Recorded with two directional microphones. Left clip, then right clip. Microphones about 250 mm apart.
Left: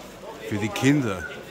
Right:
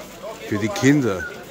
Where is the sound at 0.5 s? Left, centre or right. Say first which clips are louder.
Right 4 dB; centre.